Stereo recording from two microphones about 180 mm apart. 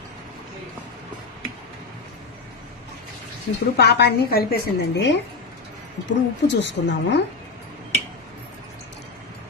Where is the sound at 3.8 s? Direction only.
65° left (ahead or behind).